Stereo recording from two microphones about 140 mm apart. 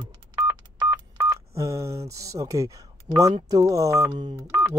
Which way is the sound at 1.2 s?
20° right (ahead or behind).